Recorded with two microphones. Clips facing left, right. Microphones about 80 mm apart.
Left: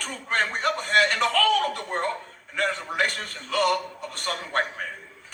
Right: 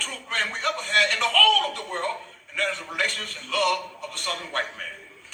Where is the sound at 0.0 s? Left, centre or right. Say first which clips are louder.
Left 3 dB; left.